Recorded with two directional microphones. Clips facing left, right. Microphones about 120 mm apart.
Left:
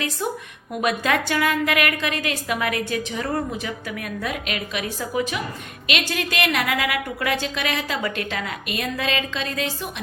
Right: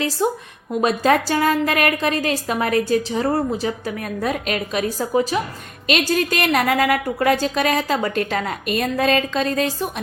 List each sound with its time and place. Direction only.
0.2 s a woman's voice: 25° right (ahead or behind)